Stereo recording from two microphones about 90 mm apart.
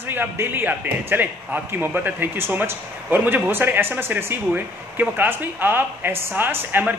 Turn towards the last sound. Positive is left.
turn(degrees=-25)  # may be behind; listen again after turning